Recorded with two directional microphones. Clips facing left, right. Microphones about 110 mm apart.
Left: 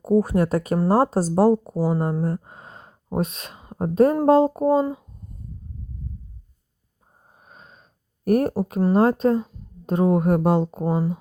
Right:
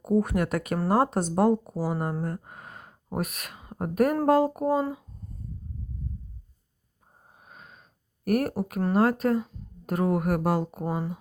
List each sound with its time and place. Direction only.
0.0 s speech: 30° left (ahead or behind)
2.2 s a sound: 25° left (ahead or behind)
4.3 s speech: 25° left (ahead or behind)
7.3 s sniff: 30° left (ahead or behind)
8.9 s speech: 25° left (ahead or behind)